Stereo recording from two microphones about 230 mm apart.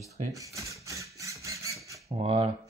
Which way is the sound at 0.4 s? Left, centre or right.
Centre.